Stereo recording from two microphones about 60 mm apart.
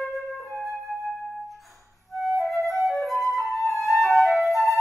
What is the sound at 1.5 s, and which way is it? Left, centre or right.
Flute, centre.